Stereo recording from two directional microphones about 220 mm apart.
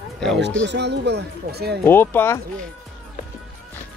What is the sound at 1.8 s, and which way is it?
Speech, 10° left (ahead or behind).